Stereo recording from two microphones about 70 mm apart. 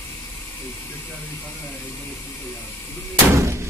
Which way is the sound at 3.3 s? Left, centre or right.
Right.